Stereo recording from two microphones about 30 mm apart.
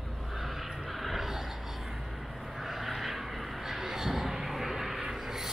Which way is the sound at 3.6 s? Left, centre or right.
Centre.